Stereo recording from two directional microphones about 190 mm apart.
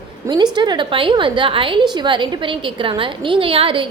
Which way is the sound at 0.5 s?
25° right (ahead or behind).